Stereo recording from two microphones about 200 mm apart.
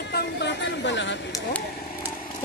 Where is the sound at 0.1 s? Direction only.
60° left (ahead or behind).